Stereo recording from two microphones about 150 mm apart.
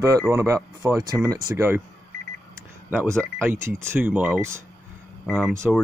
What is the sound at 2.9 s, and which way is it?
Speech, 15° right (ahead or behind).